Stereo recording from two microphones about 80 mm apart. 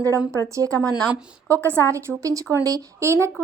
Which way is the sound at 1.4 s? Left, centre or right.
Right.